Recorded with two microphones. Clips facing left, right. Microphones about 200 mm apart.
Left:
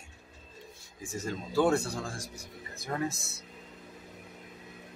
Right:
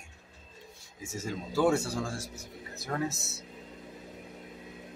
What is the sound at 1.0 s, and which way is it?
Speech, 10° right (ahead or behind).